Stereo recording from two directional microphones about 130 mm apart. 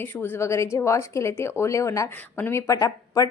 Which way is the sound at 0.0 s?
15° left (ahead or behind).